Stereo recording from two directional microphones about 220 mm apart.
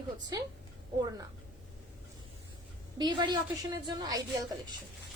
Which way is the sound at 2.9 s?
20° right (ahead or behind).